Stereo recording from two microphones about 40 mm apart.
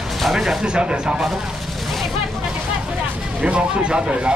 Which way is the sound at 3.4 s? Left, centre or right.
Right.